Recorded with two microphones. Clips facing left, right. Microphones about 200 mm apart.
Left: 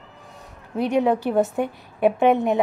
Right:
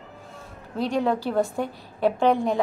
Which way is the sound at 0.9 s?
20° left (ahead or behind).